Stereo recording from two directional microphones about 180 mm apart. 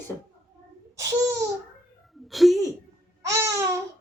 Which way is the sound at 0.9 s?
20° right (ahead or behind).